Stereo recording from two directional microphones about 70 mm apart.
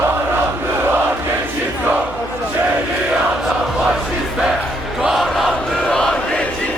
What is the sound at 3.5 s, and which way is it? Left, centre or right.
Crowd, centre.